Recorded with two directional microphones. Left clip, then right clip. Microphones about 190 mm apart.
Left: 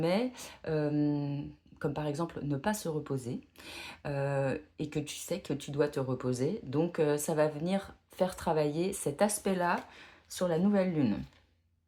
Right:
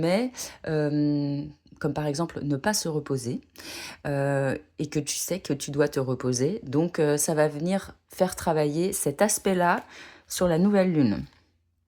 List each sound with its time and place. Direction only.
0.0 s speech: 40° right (ahead or behind)